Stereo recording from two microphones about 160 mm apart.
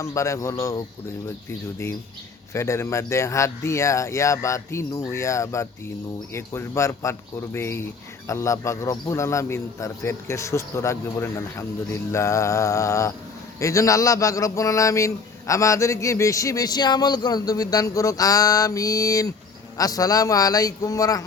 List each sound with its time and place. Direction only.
0.0 s a man's voice: 20° left (ahead or behind)